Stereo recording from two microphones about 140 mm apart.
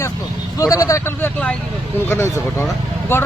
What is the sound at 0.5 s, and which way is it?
Speech, 25° left (ahead or behind).